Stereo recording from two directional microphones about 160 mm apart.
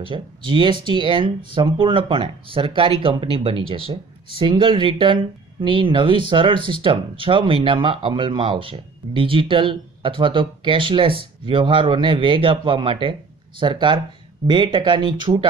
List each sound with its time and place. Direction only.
0.0 s speech: 30° right (ahead or behind)